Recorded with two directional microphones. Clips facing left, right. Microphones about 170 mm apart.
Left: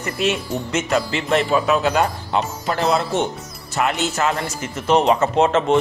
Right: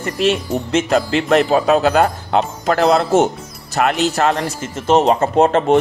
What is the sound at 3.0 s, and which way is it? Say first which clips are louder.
Speech: right 7 dB; 40° right (ahead or behind).